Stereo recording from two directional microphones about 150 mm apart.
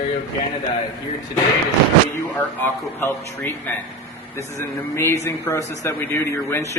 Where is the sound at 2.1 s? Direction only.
15° left (ahead or behind).